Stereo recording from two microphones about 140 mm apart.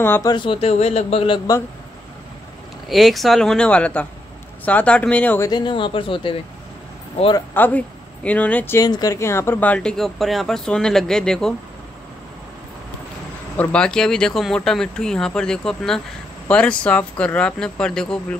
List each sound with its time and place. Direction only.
0.0 s speech: 15° left (ahead or behind)
0.3 s a man's voice: 35° left (ahead or behind)
2.9 s speech: centre (ahead or behind)
5.5 s a man's voice: 35° left (ahead or behind)
7.5 s speech: 10° left (ahead or behind)
8.8 s speech: 25° left (ahead or behind); by 11.5 s 5° left (ahead or behind)
13.6 s speech: 10° left (ahead or behind)